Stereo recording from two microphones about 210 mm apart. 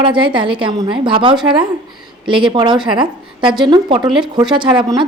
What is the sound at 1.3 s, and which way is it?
Speech, 5° right (ahead or behind).